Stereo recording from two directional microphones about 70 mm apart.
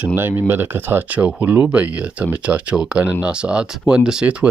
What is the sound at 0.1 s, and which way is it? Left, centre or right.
Speech, right.